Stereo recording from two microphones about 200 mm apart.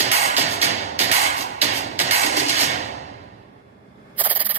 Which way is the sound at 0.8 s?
35° right (ahead or behind).